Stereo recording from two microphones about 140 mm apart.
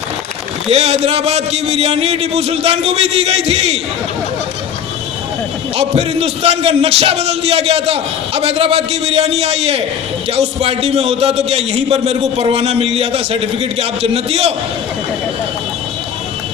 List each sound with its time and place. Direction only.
0.7 s a man's voice: 45° right (ahead or behind)
5.7 s a man's voice: 45° right (ahead or behind)